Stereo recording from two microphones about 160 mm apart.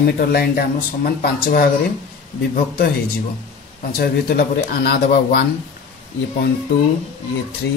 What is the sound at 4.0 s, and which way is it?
Speech, 75° left (ahead or behind).